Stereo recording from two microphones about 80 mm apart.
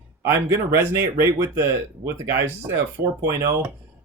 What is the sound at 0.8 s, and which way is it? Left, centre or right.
Speech, right.